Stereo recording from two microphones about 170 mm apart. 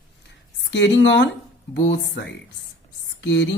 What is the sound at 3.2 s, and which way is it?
Speech, 90° left.